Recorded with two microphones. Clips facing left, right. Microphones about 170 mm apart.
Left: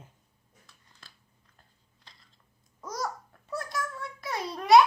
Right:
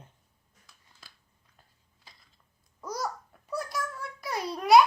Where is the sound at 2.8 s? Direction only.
Centre (ahead or behind).